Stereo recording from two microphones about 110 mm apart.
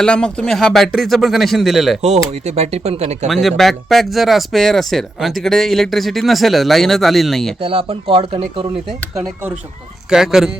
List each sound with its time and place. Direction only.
0.0 s speech: 10° left (ahead or behind)
2.0 s speech: 75° right (ahead or behind)
3.2 s speech: centre (ahead or behind)
7.6 s speech: 55° right (ahead or behind)
10.1 s speech: 5° right (ahead or behind)